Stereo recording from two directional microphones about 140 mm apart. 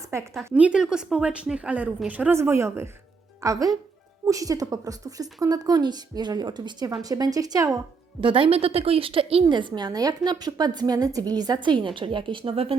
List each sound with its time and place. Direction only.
0.3 s a woman's voice: 10° right (ahead or behind); by 7.8 s 25° right (ahead or behind)
8.2 s a woman's voice: 35° right (ahead or behind)